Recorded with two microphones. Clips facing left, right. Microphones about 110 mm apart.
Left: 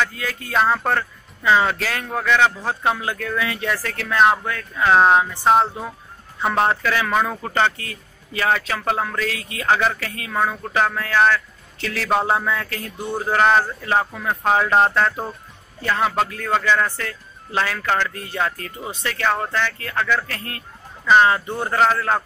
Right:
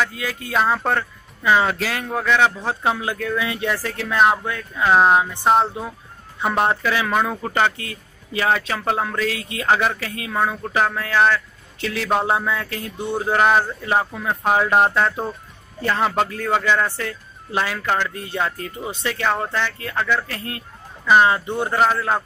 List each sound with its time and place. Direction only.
0.1 s a man's voice: 20° right (ahead or behind)
0.5 s speech: centre (ahead or behind)
0.8 s a man's voice: 15° right (ahead or behind)
4.8 s speech: 5° right (ahead or behind)
6.4 s speech: 5° right (ahead or behind)
6.7 s speech: 15° right (ahead or behind)
7.7 s a man's voice: 25° right (ahead or behind)
10.3 s a man's voice: 10° right (ahead or behind)
12.1 s speech: centre (ahead or behind)
12.5 s a man's voice: 20° right (ahead or behind)
15.8 s a man's voice: 25° right (ahead or behind)
19.2 s a man's voice: 10° right (ahead or behind)
21.0 s a man's voice: 10° right (ahead or behind)
21.7 s speech: 5° right (ahead or behind)